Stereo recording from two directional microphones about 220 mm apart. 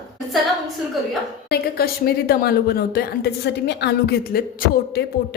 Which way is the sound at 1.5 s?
45° left (ahead or behind).